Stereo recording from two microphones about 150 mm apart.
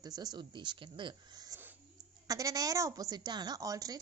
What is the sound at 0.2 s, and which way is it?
A woman's voice, 30° right (ahead or behind).